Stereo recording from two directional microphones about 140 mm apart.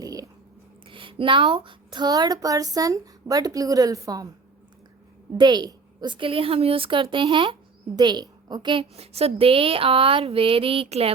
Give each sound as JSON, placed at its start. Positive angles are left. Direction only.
{"t": 0.0, "sound": "a sound", "side_deg": -25}
{"t": 0.9, "sound": "speech", "side_deg": -40}
{"t": 5.4, "sound": "a woman's voice", "side_deg": -30}